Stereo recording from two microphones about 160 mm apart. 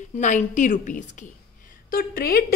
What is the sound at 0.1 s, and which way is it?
A woman's voice, 50° left (ahead or behind).